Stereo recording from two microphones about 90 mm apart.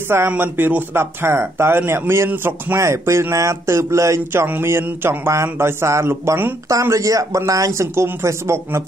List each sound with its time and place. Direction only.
0.3 s speech: 20° right (ahead or behind)
6.7 s speech: 35° right (ahead or behind)